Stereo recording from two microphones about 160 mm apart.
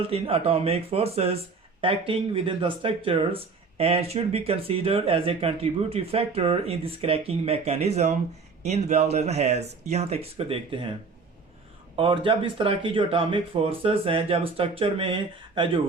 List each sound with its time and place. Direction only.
0.1 s speech: 35° right (ahead or behind)
11.9 s speech: 35° right (ahead or behind)